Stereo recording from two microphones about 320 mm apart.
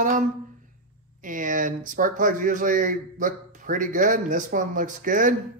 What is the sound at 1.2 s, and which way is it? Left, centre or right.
Speech, right.